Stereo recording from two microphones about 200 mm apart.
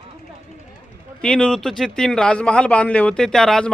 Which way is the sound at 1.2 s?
5° left (ahead or behind).